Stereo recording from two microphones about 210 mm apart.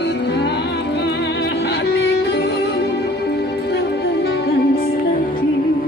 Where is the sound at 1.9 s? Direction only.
55° left (ahead or behind).